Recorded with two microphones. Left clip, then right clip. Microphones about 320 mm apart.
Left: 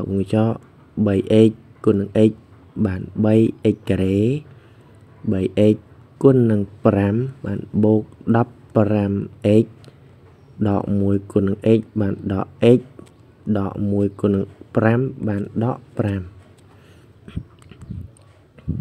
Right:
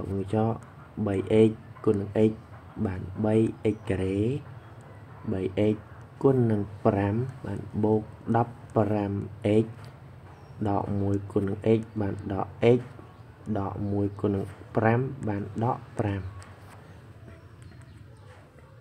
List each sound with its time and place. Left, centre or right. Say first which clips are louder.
0.3 s speech: left 5 dB; left